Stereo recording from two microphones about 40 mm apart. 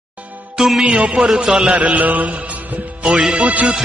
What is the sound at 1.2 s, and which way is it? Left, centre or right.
Music, centre.